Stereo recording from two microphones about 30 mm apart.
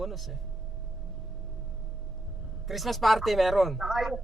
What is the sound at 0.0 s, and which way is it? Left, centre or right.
Speech, centre.